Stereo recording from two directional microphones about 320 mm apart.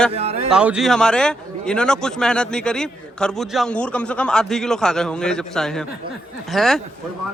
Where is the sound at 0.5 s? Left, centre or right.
Centre.